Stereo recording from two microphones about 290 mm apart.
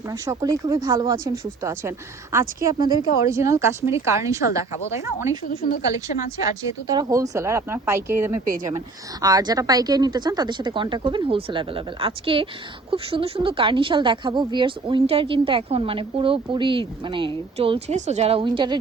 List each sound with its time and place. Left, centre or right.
0.1 s a woman's voice: centre
5.5 s speech: left
6.6 s a woman's voice: centre